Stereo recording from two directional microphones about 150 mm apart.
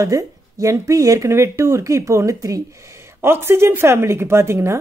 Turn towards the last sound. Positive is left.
turn(degrees=-15)  # may be behind; listen again after turning